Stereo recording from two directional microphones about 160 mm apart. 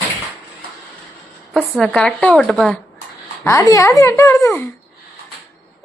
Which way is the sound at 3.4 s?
20° left (ahead or behind).